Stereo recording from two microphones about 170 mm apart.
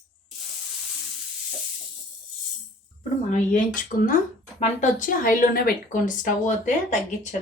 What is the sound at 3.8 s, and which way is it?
Speech, 55° left (ahead or behind).